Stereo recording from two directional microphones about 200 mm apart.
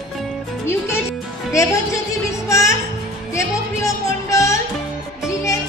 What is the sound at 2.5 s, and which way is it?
Music, 15° left (ahead or behind).